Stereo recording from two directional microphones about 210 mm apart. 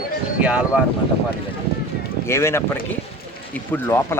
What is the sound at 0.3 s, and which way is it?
Speech, 5° right (ahead or behind).